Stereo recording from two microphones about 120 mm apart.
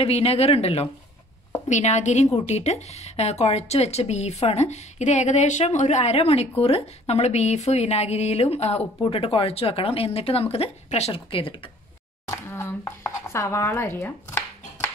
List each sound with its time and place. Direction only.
0.0 s speech: 55° left (ahead or behind)
1.7 s a woman's voice: 75° left (ahead or behind)
9.0 s speech: 50° left (ahead or behind)
12.3 s a sound: 25° left (ahead or behind)